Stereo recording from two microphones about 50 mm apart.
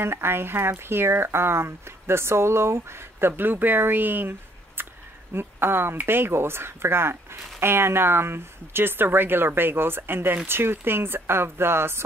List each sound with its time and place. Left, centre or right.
0.0 s speech: right